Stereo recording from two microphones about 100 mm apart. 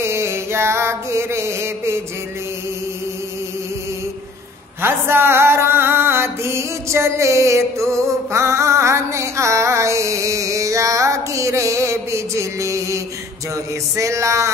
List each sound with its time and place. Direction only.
0.0 s mantra: 25° right (ahead or behind)
4.8 s music: 25° right (ahead or behind)